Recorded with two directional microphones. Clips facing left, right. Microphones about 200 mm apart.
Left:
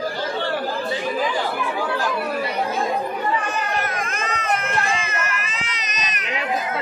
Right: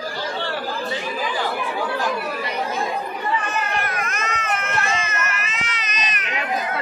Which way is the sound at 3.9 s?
30° left (ahead or behind).